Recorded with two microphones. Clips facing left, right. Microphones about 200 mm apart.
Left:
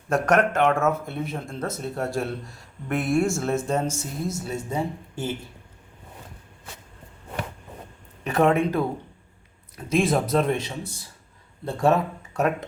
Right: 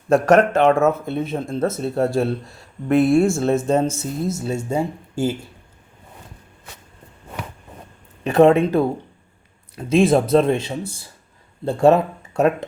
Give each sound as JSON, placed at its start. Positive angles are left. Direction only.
{"t": 0.1, "sound": "speech", "side_deg": -25}
{"t": 8.2, "sound": "speech", "side_deg": -30}